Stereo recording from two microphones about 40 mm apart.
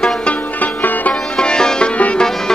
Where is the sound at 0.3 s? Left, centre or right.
Left.